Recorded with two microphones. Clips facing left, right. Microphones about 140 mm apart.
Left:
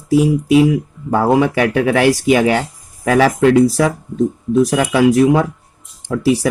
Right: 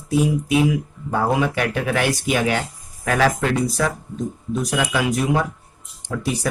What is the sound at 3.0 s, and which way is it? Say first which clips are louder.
Speech: left 7 dB; 70° left (ahead or behind).